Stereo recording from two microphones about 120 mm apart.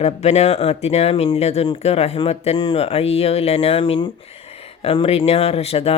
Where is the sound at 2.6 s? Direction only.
50° left (ahead or behind).